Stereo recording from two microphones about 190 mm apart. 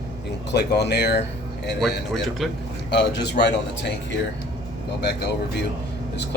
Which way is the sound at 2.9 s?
60° left (ahead or behind).